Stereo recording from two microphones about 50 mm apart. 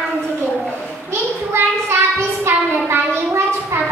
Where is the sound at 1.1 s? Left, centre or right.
Right.